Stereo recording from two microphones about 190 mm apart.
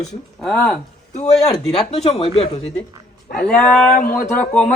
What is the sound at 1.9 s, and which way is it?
Speech, 30° left (ahead or behind).